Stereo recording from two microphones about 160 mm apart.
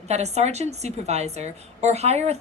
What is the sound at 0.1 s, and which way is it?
A woman's voice, 45° right (ahead or behind).